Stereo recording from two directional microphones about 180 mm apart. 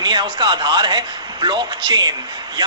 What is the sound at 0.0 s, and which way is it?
A woman's voice, 25° right (ahead or behind).